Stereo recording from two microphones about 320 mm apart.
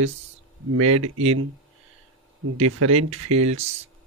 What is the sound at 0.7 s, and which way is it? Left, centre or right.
Speech, right.